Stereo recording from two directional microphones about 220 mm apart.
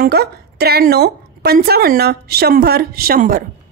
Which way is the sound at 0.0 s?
45° right (ahead or behind).